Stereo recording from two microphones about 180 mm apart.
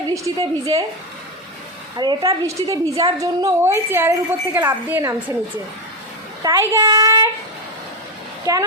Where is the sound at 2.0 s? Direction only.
20° right (ahead or behind).